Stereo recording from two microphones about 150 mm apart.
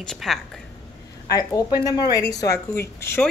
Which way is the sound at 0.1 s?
Centre (ahead or behind).